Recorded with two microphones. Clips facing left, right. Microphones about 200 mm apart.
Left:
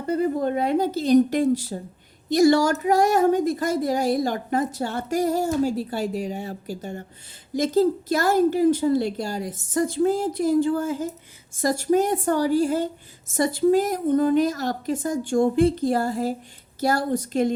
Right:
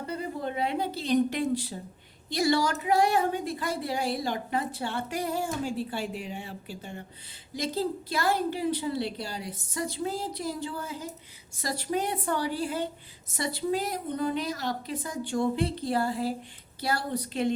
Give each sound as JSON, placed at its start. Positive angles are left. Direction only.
{"t": 0.1, "sound": "a woman's voice", "side_deg": 45}